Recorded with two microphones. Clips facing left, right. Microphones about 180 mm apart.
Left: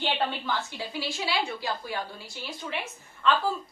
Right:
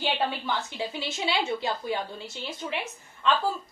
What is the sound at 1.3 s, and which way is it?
A woman's voice, 20° right (ahead or behind).